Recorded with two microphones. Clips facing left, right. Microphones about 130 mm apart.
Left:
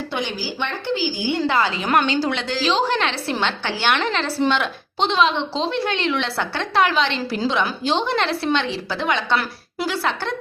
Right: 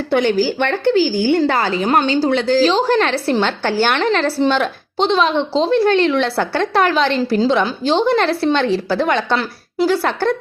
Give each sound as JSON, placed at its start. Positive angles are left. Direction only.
{"t": 0.1, "sound": "a woman's voice", "side_deg": -55}
{"t": 9.9, "sound": "speech", "side_deg": -45}